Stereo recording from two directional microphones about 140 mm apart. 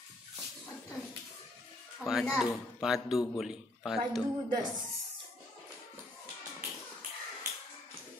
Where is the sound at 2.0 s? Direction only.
5° right (ahead or behind).